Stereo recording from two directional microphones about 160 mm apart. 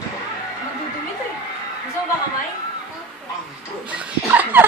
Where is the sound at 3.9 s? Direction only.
10° right (ahead or behind).